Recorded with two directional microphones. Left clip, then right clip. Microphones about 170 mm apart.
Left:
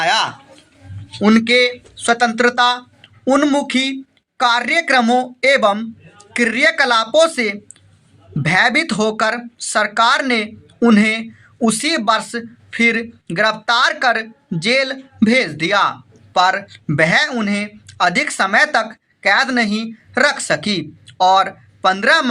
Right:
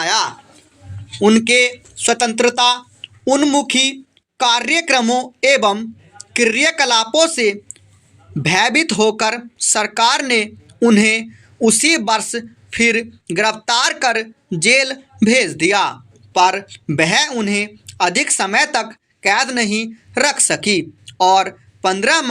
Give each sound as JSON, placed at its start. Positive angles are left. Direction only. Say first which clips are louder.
{"t": 0.0, "sound": "a man's voice", "louder": "left 1 dB", "side_deg": -10}
{"t": 1.5, "sound": "speech", "louder": "even", "side_deg": -25}